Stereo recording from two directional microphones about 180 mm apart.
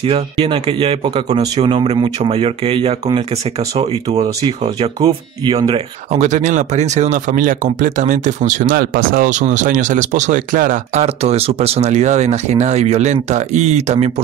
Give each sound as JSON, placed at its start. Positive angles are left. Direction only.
{"t": 0.0, "sound": "speech", "side_deg": -30}